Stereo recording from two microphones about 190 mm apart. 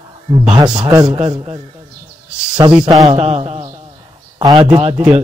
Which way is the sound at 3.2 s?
35° right (ahead or behind).